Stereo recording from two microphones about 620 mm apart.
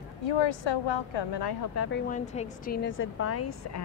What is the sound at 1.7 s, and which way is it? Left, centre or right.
Speech, centre.